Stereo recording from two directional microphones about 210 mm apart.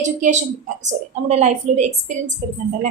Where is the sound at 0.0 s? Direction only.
35° right (ahead or behind).